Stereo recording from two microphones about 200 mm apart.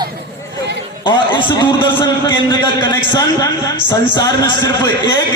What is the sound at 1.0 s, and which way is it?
A man's voice, 25° left (ahead or behind).